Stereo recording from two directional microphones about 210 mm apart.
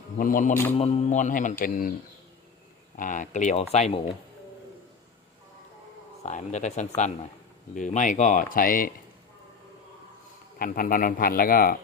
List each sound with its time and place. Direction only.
0.2 s speech: 40° left (ahead or behind)
2.9 s speech: 40° left (ahead or behind)
6.2 s speech: 35° left (ahead or behind)
10.6 s speech: 40° left (ahead or behind)